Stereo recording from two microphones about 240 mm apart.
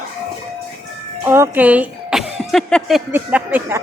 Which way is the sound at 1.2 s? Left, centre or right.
Centre.